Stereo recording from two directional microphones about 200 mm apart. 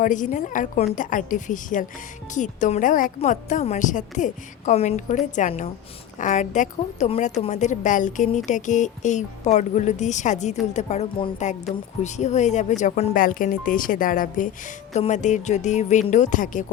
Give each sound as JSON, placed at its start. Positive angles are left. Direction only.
{"t": 0.0, "sound": "a woman's voice", "side_deg": 40}